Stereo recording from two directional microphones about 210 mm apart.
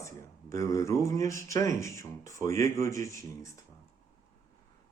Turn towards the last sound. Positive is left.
turn(degrees=15)  # may be behind; listen again after turning